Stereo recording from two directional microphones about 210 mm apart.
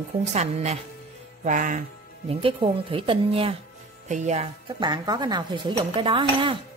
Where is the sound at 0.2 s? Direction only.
30° right (ahead or behind).